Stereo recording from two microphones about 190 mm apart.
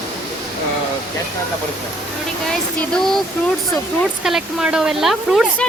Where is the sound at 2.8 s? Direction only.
Centre (ahead or behind).